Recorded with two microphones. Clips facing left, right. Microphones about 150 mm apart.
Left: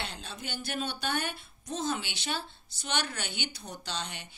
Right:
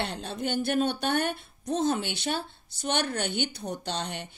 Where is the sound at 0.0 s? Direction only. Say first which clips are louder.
Right 9 dB; 55° right (ahead or behind).